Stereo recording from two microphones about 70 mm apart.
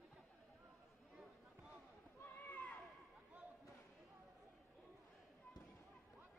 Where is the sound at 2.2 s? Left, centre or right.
Left.